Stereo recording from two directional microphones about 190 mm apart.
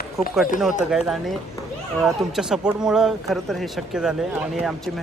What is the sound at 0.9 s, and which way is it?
Speech, 5° right (ahead or behind).